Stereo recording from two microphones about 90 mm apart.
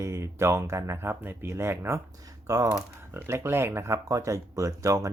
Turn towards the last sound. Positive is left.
turn(degrees=-35)  # may be behind; listen again after turning